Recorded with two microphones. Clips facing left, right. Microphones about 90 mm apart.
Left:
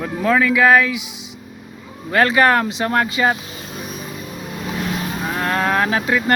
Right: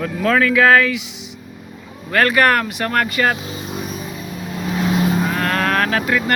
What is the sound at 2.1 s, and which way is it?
Speech, 20° left (ahead or behind).